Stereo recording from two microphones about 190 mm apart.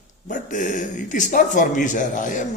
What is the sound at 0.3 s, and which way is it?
Speech, 45° left (ahead or behind).